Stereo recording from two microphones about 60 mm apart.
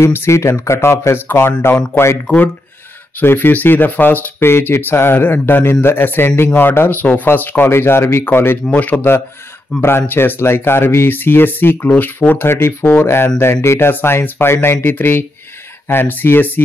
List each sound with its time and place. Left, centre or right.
0.0 s speech: left
2.2 s speech: left
3.2 s speech: left
8.6 s speech: left
9.8 s speech: left